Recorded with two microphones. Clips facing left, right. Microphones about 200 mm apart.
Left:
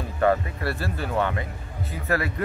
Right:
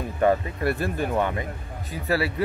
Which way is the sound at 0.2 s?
20° right (ahead or behind).